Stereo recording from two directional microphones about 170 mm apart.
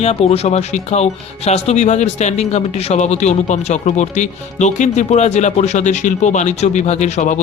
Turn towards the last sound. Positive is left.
turn(degrees=45)  # may be behind; listen again after turning